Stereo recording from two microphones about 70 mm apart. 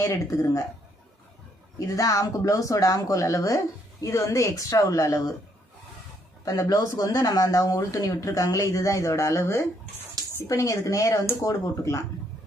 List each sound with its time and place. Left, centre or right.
0.3 s speech: left
1.9 s speech: left
6.4 s speech: left